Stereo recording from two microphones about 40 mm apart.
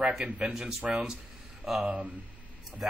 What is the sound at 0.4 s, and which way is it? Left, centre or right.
Speech, centre.